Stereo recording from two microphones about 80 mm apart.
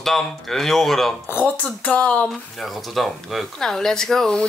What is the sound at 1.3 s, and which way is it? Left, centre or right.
Speech, centre.